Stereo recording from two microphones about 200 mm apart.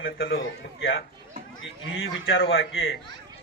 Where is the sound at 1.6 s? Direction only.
80° left.